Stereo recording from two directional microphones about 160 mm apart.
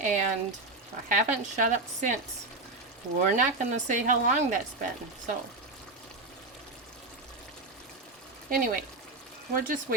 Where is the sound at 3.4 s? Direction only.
50° right (ahead or behind).